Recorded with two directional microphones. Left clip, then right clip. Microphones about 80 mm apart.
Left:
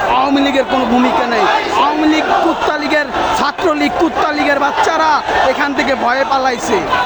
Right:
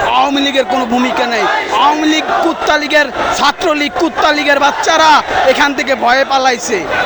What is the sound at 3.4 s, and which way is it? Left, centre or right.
A man's voice, right.